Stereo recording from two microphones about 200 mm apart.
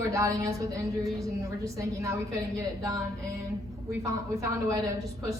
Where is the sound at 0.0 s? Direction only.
15° right (ahead or behind).